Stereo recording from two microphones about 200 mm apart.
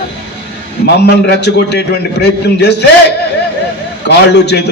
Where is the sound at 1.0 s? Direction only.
60° left (ahead or behind).